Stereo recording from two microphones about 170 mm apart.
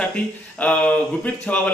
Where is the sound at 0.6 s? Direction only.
10° left (ahead or behind).